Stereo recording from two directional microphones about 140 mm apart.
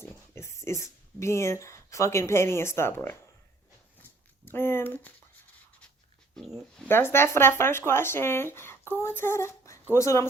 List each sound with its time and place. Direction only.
0.0 s speech: 20° left (ahead or behind)
4.4 s speech: 15° left (ahead or behind)
6.3 s speech: centre (ahead or behind)
6.8 s speech: 15° left (ahead or behind)